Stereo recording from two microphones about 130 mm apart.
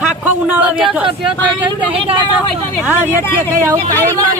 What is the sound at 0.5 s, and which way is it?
Speech, 10° right (ahead or behind).